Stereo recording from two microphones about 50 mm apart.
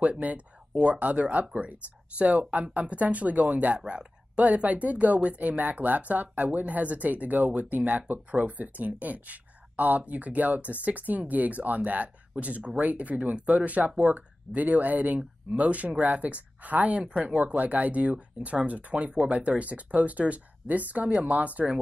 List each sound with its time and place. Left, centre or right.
0.0 s speech: right